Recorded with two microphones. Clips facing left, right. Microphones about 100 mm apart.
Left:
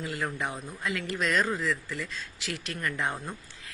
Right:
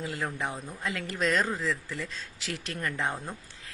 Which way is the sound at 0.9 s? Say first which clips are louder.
Right 1 dB; 35° right (ahead or behind).